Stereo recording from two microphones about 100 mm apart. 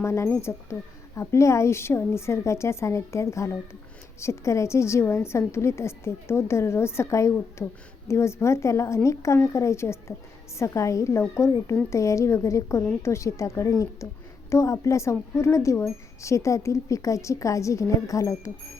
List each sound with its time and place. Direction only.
0.0 s speech: 25° left (ahead or behind)
7.6 s speech: 15° left (ahead or behind)
8.0 s speech: 25° left (ahead or behind)